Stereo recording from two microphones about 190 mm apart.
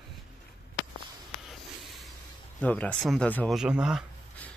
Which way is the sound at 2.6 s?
5° left (ahead or behind).